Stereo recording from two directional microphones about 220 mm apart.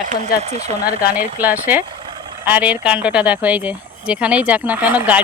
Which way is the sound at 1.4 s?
10° right (ahead or behind).